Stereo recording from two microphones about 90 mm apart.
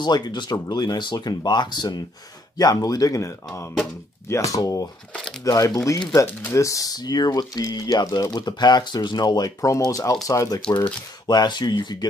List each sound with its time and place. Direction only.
0.0 s speech: 55° left (ahead or behind)
2.5 s speech: 45° left (ahead or behind)
5.1 s speech: 5° left (ahead or behind)
5.4 s speech: 40° left (ahead or behind)
10.7 s speech: 55° left (ahead or behind)